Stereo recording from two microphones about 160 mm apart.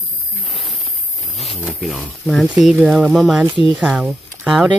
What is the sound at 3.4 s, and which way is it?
Speech, 30° right (ahead or behind).